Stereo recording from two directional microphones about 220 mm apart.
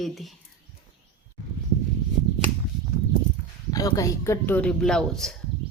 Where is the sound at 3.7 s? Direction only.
15° left (ahead or behind).